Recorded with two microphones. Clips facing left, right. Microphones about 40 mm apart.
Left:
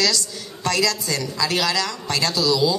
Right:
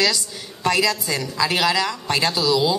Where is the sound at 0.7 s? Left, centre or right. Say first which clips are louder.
Right 2 dB; centre.